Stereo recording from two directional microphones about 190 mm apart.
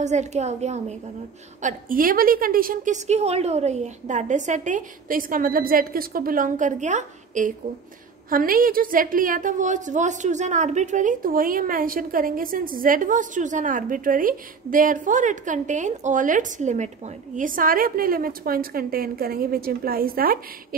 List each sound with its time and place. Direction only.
0.0 s a woman's voice: 40° right (ahead or behind)